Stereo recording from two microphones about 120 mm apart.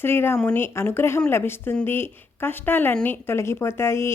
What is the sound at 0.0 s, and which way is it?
A woman's voice, 20° left (ahead or behind).